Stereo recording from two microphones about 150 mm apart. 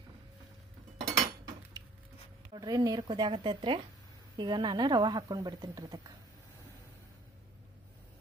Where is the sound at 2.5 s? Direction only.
25° right (ahead or behind).